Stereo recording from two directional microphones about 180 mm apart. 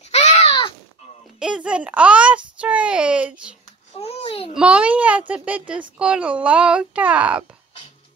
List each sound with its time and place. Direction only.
0.1 s a sound: 35° left (ahead or behind)
1.4 s a child's voice: 5° right (ahead or behind)
4.0 s babbling: 35° left (ahead or behind)
4.6 s a child's voice: 5° right (ahead or behind)